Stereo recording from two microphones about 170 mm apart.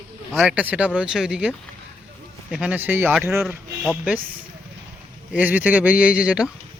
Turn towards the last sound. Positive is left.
turn(degrees=-5)  # may be behind; listen again after turning